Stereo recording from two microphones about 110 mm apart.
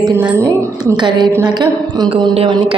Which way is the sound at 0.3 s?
30° right (ahead or behind).